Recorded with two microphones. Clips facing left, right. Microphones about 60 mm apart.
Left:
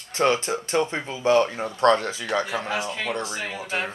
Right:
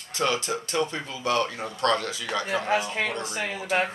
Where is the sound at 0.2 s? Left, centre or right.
Left.